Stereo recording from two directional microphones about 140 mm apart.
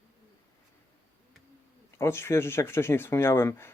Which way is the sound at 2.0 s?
15° left (ahead or behind).